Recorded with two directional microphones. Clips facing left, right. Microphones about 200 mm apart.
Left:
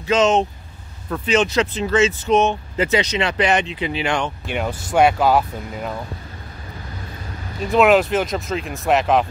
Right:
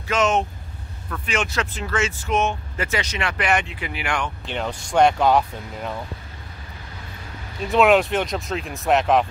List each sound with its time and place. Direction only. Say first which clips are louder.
0.1 s speech: left 4 dB; 20° left (ahead or behind)
4.5 s speech: left 3 dB; 10° left (ahead or behind)
7.6 s speech: left 2 dB; centre (ahead or behind)